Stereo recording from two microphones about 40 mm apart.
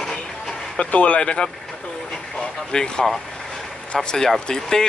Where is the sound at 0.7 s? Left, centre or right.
Left.